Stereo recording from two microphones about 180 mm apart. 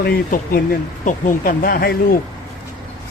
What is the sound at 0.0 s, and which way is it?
Speech, 55° left (ahead or behind).